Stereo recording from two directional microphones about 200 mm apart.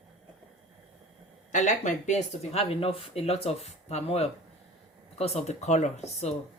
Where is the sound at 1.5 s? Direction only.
40° left (ahead or behind).